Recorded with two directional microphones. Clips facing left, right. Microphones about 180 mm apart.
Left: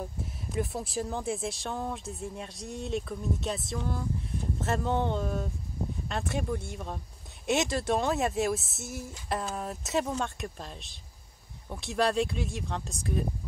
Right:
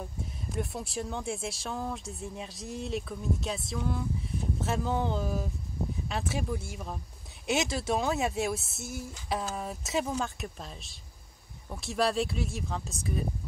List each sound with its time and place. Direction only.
0.0 s speech: centre (ahead or behind)